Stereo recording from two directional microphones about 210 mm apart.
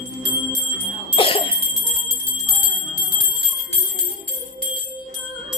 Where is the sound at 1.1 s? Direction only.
25° left (ahead or behind).